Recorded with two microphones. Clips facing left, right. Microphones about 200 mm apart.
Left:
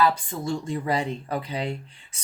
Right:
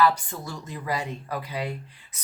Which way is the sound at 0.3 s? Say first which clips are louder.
Left 8 dB; 25° left (ahead or behind).